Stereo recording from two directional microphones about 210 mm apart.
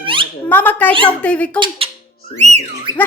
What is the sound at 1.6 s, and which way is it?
Speech, 25° right (ahead or behind).